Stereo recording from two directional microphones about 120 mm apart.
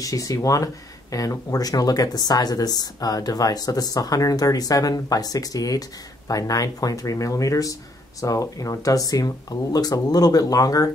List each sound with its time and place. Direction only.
0.0 s speech: 30° left (ahead or behind)